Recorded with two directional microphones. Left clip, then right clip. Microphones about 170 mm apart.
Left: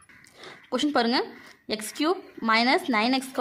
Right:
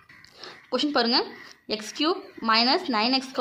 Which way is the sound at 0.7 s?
35° left (ahead or behind).